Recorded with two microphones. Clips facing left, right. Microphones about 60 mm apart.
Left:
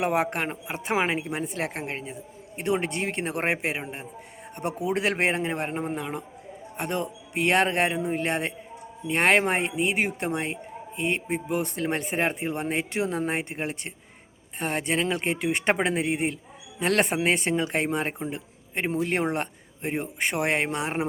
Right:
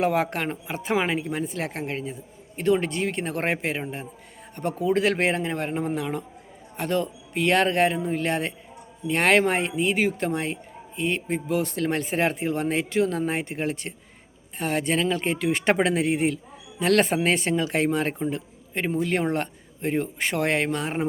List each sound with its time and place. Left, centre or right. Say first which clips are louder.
0.0 s a man's voice: right 2 dB; left
4.5 s a man's voice: right 2 dB; left
4.8 s a man's voice: right 3 dB; left
15.6 s a man's voice: right 3 dB; centre
16.8 s a man's voice: right 3 dB; left
17.8 s a man's voice: right 4 dB; centre
18.3 s a sound: right 1 dB; left
19.0 s a man's voice: right 2 dB; left